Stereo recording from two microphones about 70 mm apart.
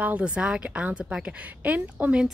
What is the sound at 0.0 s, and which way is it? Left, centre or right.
A woman's voice, centre.